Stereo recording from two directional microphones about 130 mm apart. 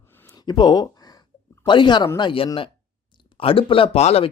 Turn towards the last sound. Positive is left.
turn(degrees=55)  # may be behind; listen again after turning